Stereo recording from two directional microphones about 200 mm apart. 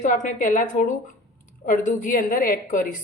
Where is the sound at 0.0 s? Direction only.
40° left (ahead or behind).